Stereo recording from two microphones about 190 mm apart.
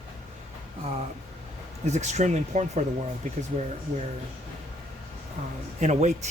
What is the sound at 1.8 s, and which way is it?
Speech, 35° right (ahead or behind).